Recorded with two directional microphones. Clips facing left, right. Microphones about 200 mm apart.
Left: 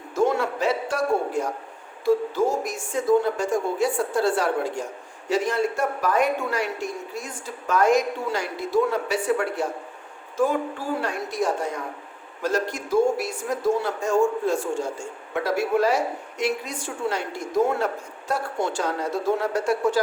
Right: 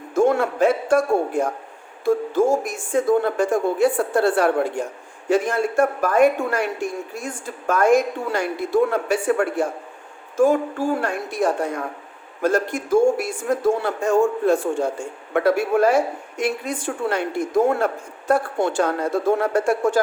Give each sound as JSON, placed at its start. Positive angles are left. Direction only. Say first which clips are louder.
{"t": 0.1, "sound": "a man's voice", "louder": "right 4 dB", "side_deg": -50}